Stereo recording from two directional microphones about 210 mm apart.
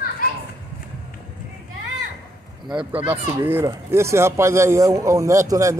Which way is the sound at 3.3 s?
10° right (ahead or behind).